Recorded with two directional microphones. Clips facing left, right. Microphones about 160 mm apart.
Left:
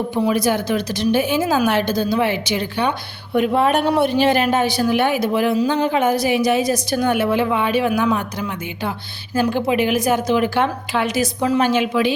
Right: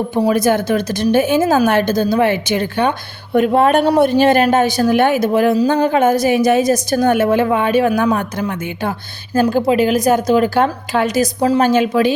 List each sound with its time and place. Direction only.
0.1 s a woman's voice: 45° right (ahead or behind)